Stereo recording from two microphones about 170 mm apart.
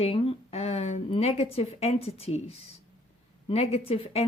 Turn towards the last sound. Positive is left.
turn(degrees=35)  # may be behind; listen again after turning